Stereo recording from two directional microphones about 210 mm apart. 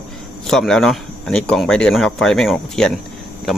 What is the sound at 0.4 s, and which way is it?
Speech, centre (ahead or behind).